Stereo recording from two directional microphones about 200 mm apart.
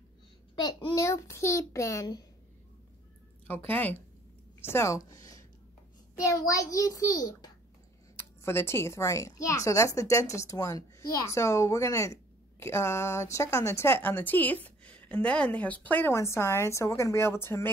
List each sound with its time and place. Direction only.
0.6 s speech: 20° left (ahead or behind)
3.4 s speech: 10° left (ahead or behind)